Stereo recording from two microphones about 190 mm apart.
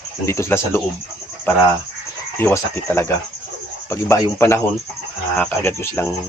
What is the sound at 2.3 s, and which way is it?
Speech, 15° left (ahead or behind).